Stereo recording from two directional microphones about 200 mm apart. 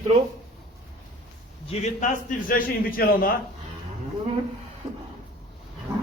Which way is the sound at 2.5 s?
45° left (ahead or behind).